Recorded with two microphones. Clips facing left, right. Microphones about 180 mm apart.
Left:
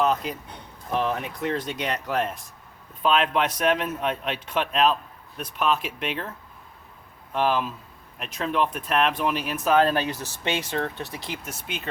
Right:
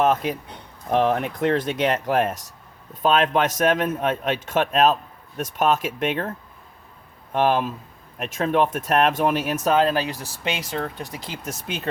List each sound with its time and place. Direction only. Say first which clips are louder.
0.0 s a sound: right 3 dB; 50° right (ahead or behind)
0.9 s speech: right 6 dB; 55° right (ahead or behind)
7.3 s speech: right 4 dB; 50° right (ahead or behind)
9.9 s speech: right 1 dB; 35° right (ahead or behind)